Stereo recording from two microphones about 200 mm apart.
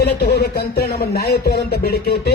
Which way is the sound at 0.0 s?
55° left (ahead or behind).